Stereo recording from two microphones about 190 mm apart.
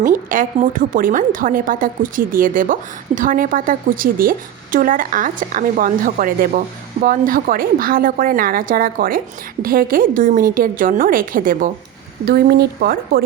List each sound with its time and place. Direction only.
0.1 s a woman's voice: 45° right (ahead or behind)